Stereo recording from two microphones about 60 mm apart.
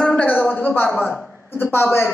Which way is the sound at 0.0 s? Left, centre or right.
Left.